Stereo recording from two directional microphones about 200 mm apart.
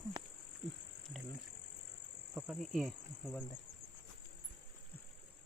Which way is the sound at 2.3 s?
5° right (ahead or behind).